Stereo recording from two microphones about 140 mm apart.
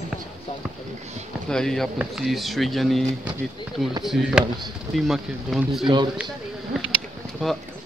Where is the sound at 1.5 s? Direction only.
5° left (ahead or behind).